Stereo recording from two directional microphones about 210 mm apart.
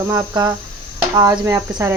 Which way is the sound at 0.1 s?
15° right (ahead or behind).